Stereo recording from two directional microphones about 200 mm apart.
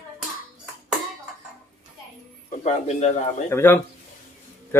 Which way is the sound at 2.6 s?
35° left (ahead or behind).